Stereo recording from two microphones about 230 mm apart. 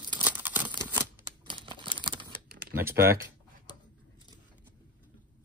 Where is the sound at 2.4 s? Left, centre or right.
Right.